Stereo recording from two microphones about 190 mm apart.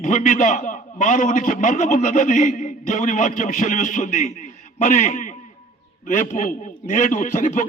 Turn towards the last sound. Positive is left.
turn(degrees=45)  # may be behind; listen again after turning